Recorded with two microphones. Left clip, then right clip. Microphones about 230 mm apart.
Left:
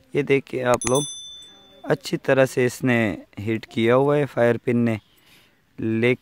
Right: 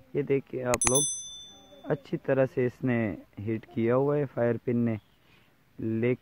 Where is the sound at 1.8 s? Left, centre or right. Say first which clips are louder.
Left 8 dB; left.